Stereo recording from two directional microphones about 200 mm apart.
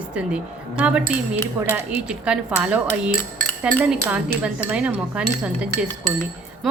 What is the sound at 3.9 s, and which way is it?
Speech, 5° right (ahead or behind).